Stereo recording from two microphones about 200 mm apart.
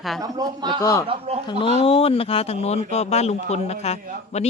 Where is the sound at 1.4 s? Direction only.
25° left (ahead or behind).